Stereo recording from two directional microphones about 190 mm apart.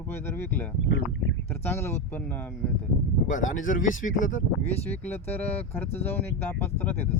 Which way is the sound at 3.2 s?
45° left (ahead or behind).